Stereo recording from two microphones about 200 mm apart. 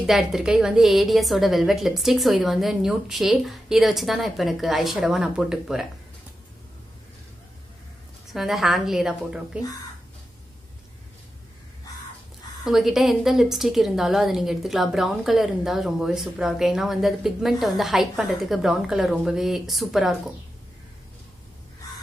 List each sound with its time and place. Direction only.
0.0 s a woman's voice: centre (ahead or behind)
8.3 s a woman's voice: centre (ahead or behind)
12.6 s a woman's voice: centre (ahead or behind)